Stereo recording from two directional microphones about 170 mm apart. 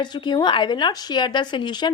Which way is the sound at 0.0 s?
25° left (ahead or behind).